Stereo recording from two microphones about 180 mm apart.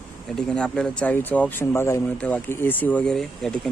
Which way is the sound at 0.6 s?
5° left (ahead or behind).